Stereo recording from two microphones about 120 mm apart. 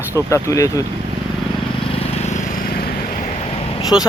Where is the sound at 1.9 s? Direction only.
55° left (ahead or behind).